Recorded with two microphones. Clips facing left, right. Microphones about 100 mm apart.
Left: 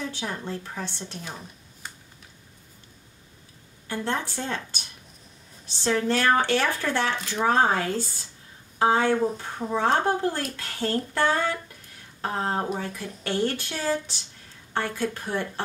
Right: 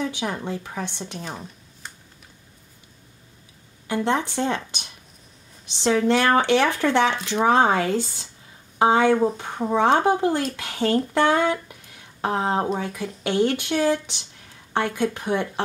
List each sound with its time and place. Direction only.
0.0 s speech: 15° right (ahead or behind)
4.1 s speech: 20° right (ahead or behind)
6.1 s a woman's voice: 20° right (ahead or behind)